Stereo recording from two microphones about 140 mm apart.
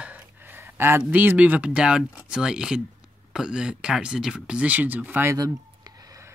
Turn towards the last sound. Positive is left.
turn(degrees=-25)  # may be behind; listen again after turning